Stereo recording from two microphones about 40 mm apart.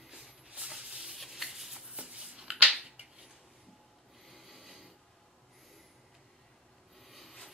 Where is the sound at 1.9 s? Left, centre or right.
Right.